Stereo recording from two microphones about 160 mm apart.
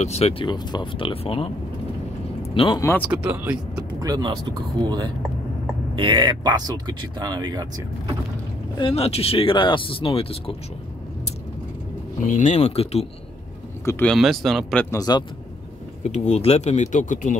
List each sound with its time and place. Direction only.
0.0 s speech: 40° left (ahead or behind)
2.8 s speech: 15° left (ahead or behind)
3.1 s speech: 10° right (ahead or behind)
4.0 s speech: 25° right (ahead or behind)
8.7 s speech: 35° left (ahead or behind)
12.3 s speech: 50° left (ahead or behind)
14.0 s speech: centre (ahead or behind)
14.9 s speech: 25° left (ahead or behind)
16.0 s speech: 45° left (ahead or behind)